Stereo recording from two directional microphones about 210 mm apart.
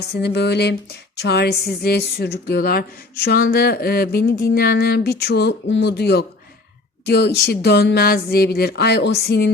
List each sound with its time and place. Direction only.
0.2 s a woman's voice: 50° left (ahead or behind)